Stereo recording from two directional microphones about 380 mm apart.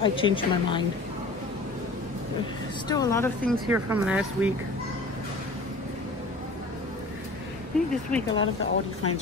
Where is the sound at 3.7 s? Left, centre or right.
Centre.